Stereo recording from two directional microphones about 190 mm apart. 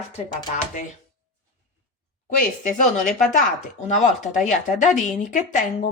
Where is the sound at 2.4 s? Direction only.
40° left (ahead or behind).